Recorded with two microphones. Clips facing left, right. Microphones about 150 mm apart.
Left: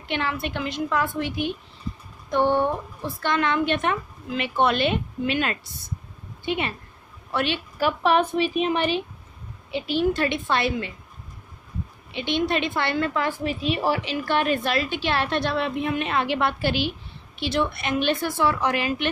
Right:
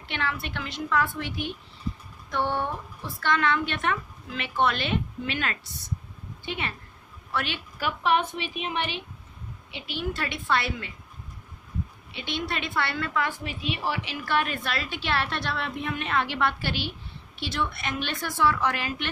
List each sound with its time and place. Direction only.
0.1 s a woman's voice: 20° left (ahead or behind); by 10.0 s 35° left (ahead or behind)
10.1 s a woman's voice: 25° left (ahead or behind)
12.1 s a woman's voice: 20° left (ahead or behind); by 14.0 s 40° left (ahead or behind)
14.0 s a woman's voice: 25° left (ahead or behind)